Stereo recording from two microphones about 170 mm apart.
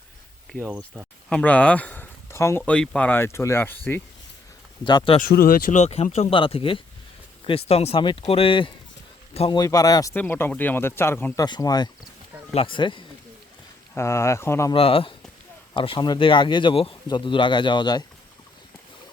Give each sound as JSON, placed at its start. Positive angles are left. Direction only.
{"t": 0.9, "sound": "speech", "side_deg": 10}
{"t": 4.8, "sound": "speech", "side_deg": 25}
{"t": 5.3, "sound": "a man's voice", "side_deg": 60}
{"t": 9.6, "sound": "speech", "side_deg": 20}
{"t": 11.4, "sound": "speech", "side_deg": 25}
{"t": 13.9, "sound": "speech", "side_deg": 15}
{"t": 14.7, "sound": "speech", "side_deg": 35}